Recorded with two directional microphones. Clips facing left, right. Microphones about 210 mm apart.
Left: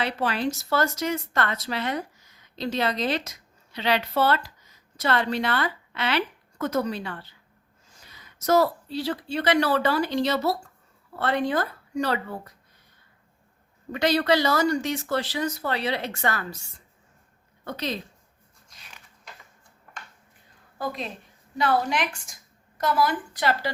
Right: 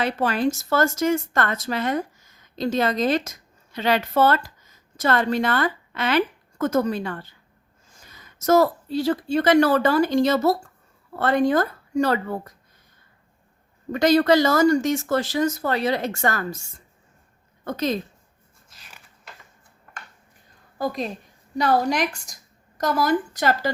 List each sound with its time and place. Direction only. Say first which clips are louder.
0.0 s a woman's voice: right 4 dB; 45° right (ahead or behind)
13.9 s speech: right 5 dB; 45° right (ahead or behind)
17.7 s speech: right 6 dB; 45° right (ahead or behind)
18.7 s creak: even; 5° right (ahead or behind)
20.7 s a woman's voice: right 5 dB; 40° right (ahead or behind)